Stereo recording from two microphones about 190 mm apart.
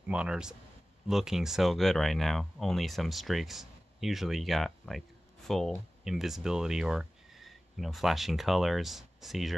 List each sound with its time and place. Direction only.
0.0 s speech: 5° right (ahead or behind)